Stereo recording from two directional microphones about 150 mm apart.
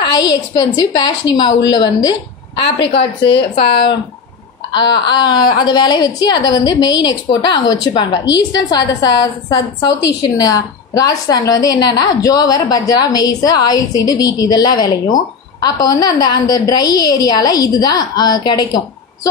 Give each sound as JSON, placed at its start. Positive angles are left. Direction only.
{"t": 0.0, "sound": "a woman's voice", "side_deg": 30}
{"t": 4.9, "sound": "a woman's voice", "side_deg": 30}